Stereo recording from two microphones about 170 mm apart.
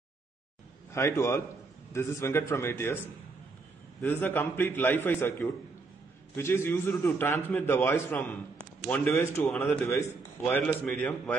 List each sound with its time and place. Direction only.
0.9 s a man's voice: 15° left (ahead or behind)
4.0 s a man's voice: 10° left (ahead or behind)